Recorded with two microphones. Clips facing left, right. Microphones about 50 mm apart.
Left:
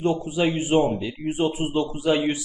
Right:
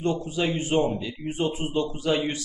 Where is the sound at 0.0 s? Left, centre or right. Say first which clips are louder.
Left 3 dB; centre.